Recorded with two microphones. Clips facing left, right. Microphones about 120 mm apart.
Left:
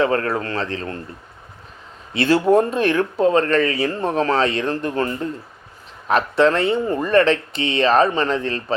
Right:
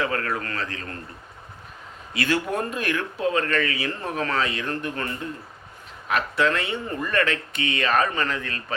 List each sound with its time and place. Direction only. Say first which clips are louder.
0.0 s speech: left 7 dB; 30° left (ahead or behind)
2.1 s speech: left 10 dB; 30° left (ahead or behind)